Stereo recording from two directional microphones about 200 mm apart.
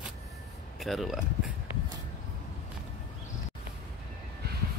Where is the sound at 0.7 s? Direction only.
Centre (ahead or behind).